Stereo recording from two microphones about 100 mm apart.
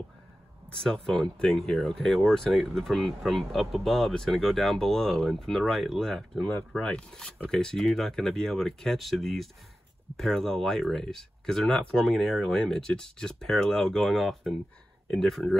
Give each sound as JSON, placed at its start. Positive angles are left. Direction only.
{"t": 0.7, "sound": "speech", "side_deg": 5}